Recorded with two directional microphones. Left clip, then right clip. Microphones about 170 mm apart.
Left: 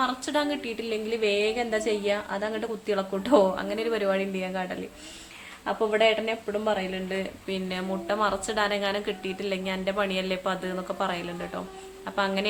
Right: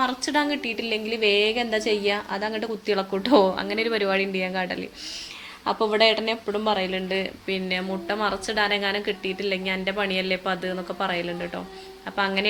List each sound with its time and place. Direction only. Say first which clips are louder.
0.0 s speech: right 3 dB; 15° right (ahead or behind)